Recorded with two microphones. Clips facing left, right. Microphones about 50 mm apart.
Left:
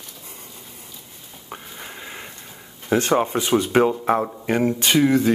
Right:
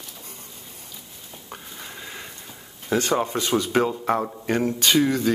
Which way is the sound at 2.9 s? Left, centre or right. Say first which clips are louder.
Left 3 dB; left.